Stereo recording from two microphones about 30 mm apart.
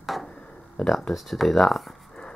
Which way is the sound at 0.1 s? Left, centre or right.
Centre.